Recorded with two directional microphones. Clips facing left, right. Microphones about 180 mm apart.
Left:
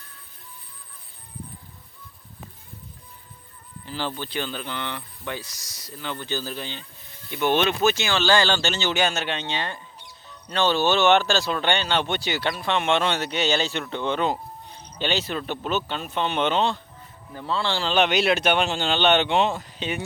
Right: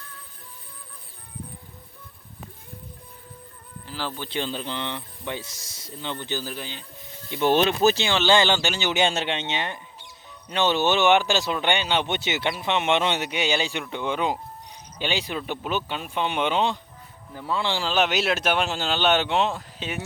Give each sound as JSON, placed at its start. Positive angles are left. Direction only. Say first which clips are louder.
{"t": 3.8, "sound": "speech", "louder": "left 2 dB", "side_deg": -5}
{"t": 4.3, "sound": "speech", "louder": "right 1 dB", "side_deg": -25}
{"t": 7.3, "sound": "speech", "louder": "right 2 dB", "side_deg": -20}
{"t": 7.5, "sound": "speech", "louder": "right 2 dB", "side_deg": -35}
{"t": 8.1, "sound": "speech", "louder": "right 1 dB", "side_deg": -20}
{"t": 17.9, "sound": "speech", "louder": "left 3 dB", "side_deg": -5}